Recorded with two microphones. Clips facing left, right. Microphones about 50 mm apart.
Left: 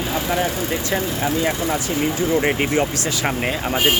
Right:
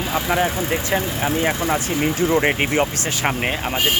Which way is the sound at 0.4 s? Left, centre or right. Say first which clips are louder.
Right 1 dB; right.